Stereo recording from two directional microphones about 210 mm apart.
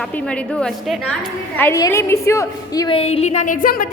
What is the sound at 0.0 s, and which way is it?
A woman's voice, 5° left (ahead or behind).